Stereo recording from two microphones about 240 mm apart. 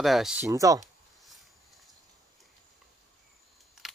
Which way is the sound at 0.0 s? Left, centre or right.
Centre.